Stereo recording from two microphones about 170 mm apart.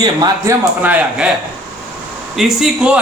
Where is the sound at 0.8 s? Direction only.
10° right (ahead or behind).